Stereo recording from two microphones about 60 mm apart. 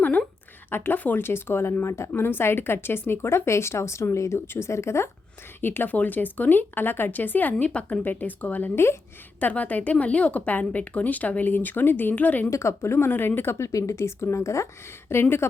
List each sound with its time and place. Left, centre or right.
0.0 s a sound: left
0.7 s speech: left
1.2 s a woman's voice: left
5.5 s speech: left
12.5 s a woman's voice: left
15.1 s a woman's voice: left